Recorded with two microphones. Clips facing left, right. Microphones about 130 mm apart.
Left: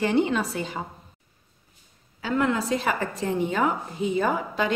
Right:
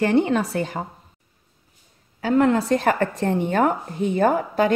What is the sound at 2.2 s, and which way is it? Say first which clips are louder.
A woman's voice: right 6 dB; 45° right (ahead or behind).